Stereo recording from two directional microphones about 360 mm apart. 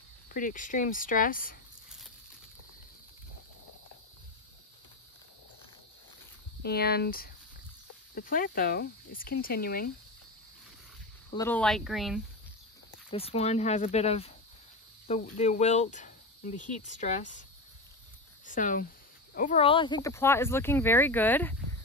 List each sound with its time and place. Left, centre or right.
0.3 s speech: left
6.6 s speech: left
11.3 s speech: centre
13.1 s speech: centre
15.3 s speech: centre